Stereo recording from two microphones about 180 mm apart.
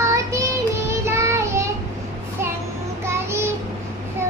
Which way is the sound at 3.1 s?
15° right (ahead or behind).